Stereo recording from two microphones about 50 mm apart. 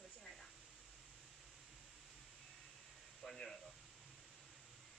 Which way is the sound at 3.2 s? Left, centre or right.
Centre.